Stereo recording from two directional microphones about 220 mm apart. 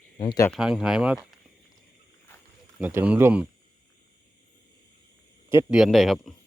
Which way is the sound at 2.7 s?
5° right (ahead or behind).